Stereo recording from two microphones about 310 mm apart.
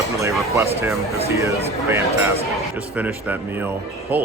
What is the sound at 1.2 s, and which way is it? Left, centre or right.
Speech, centre.